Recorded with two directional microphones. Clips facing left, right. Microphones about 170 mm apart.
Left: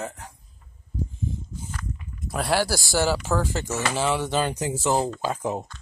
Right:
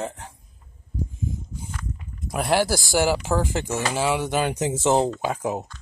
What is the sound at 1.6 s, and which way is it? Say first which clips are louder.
Speech: even; 10° right (ahead or behind).